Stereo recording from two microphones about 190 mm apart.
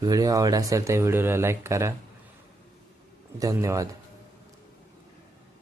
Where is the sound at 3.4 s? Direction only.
15° right (ahead or behind).